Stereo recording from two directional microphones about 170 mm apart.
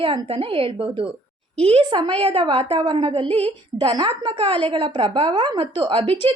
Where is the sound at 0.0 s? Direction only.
30° right (ahead or behind).